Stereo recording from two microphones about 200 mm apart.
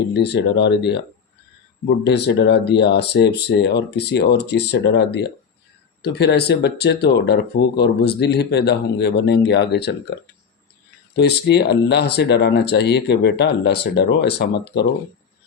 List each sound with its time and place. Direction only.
0.1 s speech: 55° left (ahead or behind)
2.0 s speech: 60° left (ahead or behind)
11.1 s speech: 55° left (ahead or behind)